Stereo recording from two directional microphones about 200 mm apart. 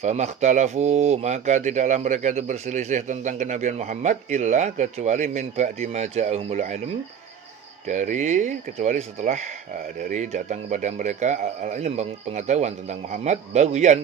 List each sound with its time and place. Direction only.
0.0 s speech: 35° right (ahead or behind)
7.9 s speech: 35° right (ahead or behind)